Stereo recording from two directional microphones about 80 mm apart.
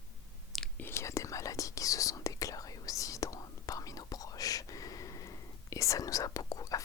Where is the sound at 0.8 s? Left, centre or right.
Left.